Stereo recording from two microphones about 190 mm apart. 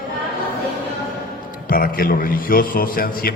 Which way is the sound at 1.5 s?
50° left (ahead or behind).